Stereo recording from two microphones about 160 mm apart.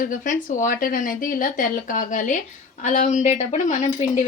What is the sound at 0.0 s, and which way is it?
Speech, 55° left (ahead or behind).